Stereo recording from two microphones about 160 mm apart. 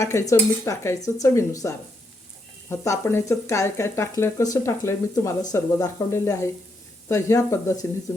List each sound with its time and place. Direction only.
0.0 s speech: 20° left (ahead or behind)